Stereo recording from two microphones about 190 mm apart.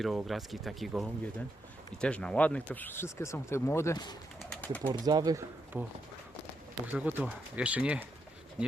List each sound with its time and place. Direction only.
0.0 s speech: centre (ahead or behind); by 4.2 s 20° left (ahead or behind)
4.4 s bird: 5° left (ahead or behind)
4.9 s speech: 20° right (ahead or behind)
6.9 s speech: 10° right (ahead or behind)